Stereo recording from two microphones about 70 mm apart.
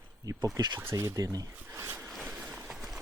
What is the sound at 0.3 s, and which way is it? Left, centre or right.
Speech, right.